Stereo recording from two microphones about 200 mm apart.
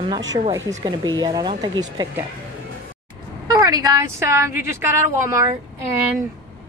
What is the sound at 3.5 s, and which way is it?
A woman's voice, 15° right (ahead or behind).